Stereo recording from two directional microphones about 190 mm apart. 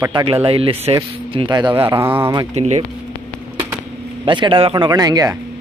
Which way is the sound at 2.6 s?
35° right (ahead or behind).